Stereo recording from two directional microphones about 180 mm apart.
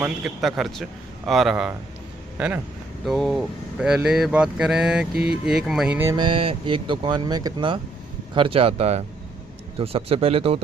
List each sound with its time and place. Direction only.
0.0 s speech: centre (ahead or behind)
3.1 s speech: centre (ahead or behind)
6.1 s speech: 25° right (ahead or behind)